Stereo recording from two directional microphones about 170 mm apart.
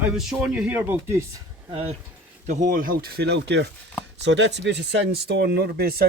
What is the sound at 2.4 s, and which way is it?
Speech, 45° right (ahead or behind).